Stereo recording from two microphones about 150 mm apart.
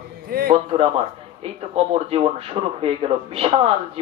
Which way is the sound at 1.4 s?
40° right (ahead or behind).